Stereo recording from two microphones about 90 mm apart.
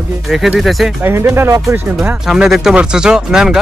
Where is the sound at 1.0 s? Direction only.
30° right (ahead or behind).